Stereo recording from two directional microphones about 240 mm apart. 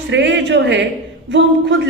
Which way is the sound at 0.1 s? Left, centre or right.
Right.